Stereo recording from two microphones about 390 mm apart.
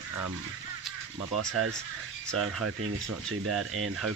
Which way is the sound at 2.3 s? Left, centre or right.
Right.